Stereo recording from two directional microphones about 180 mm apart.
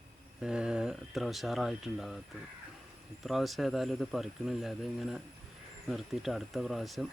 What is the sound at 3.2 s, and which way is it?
Speech, centre (ahead or behind).